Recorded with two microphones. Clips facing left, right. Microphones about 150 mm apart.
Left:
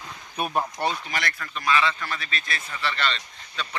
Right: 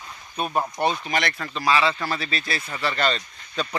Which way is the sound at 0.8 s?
20° right (ahead or behind).